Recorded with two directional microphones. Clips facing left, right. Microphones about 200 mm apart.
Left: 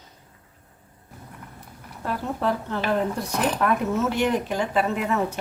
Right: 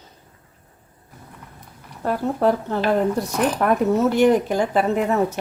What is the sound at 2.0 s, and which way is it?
Speech, 40° right (ahead or behind).